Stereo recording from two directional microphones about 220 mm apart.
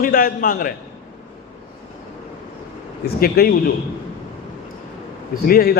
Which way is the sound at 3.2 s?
45° left (ahead or behind).